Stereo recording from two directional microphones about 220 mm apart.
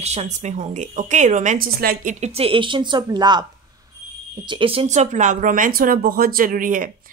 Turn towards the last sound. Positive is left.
turn(degrees=-35)  # may be behind; listen again after turning